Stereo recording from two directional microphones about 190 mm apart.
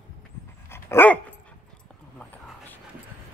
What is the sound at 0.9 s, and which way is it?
Dog, 10° left (ahead or behind).